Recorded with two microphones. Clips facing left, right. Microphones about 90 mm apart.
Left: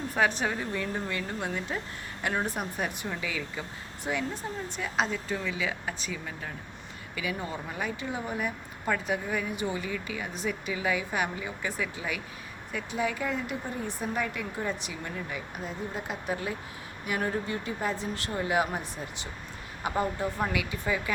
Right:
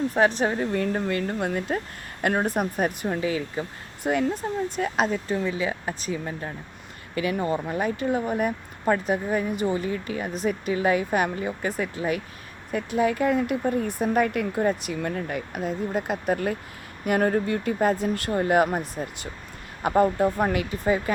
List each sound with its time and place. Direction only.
0.1 s speech: 40° right (ahead or behind)
0.7 s speech: 55° right (ahead or behind); by 3.7 s 35° right (ahead or behind)
4.0 s speech: 50° right (ahead or behind)
7.2 s speech: 55° right (ahead or behind); by 21.0 s 40° right (ahead or behind)